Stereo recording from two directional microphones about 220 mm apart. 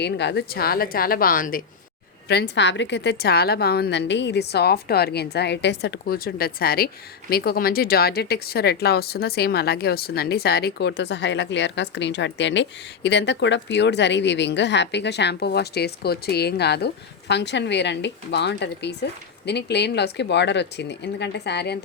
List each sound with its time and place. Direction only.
0.0 s a woman's voice: 50° left (ahead or behind)